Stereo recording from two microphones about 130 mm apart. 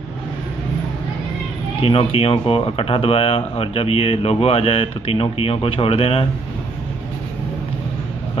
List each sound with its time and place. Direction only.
1.8 s speech: 45° left (ahead or behind)